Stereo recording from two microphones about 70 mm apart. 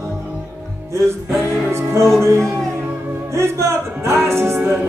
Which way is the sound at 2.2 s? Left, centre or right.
Right.